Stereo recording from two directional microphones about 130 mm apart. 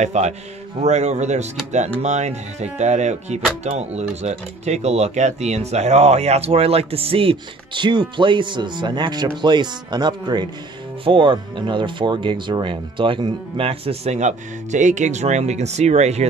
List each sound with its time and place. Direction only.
0.0 s speech: 60° right (ahead or behind)